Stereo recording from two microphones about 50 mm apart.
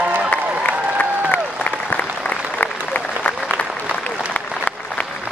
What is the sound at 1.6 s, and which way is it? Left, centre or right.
Applause, left.